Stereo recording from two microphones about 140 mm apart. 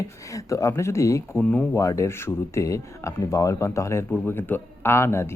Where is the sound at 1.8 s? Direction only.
20° left (ahead or behind).